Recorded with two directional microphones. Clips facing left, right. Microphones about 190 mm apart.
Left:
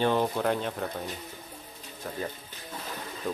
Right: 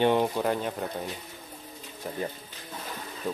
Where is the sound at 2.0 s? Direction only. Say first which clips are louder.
Right 2 dB; 15° right (ahead or behind).